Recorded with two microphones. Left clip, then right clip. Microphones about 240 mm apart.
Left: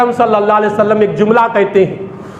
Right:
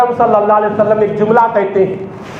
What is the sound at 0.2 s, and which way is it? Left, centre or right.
A man's voice, left.